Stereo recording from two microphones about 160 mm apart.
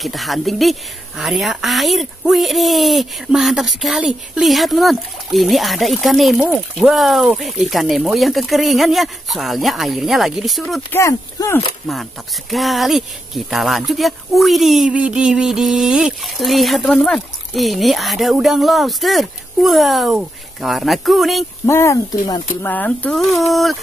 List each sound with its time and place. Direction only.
0.0 s a woman's voice: centre (ahead or behind)
10.9 s speech: 20° left (ahead or behind)
11.9 s a woman's voice: centre (ahead or behind)
21.6 s a woman's voice: 15° left (ahead or behind); by 23.8 s centre (ahead or behind)